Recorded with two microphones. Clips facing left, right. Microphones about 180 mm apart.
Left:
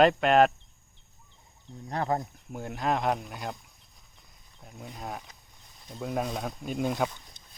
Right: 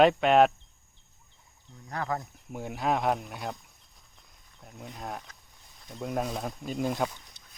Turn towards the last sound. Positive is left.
turn(degrees=0)  # may be behind; listen again after turning